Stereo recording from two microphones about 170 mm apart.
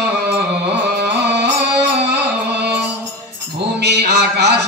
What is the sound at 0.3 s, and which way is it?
Music, 80° right.